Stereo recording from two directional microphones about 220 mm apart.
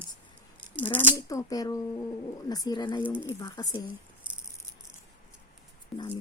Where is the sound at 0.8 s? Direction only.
10° left (ahead or behind).